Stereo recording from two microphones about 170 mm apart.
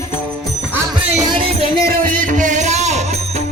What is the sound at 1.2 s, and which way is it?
Music, 30° right (ahead or behind).